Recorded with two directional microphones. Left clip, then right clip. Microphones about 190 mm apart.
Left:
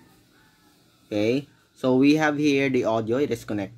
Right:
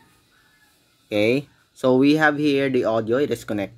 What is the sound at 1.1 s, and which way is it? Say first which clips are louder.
Speech: right 4 dB; 20° right (ahead or behind).